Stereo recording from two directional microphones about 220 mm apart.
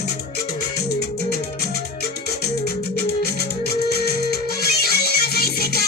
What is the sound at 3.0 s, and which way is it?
Music, 45° left (ahead or behind).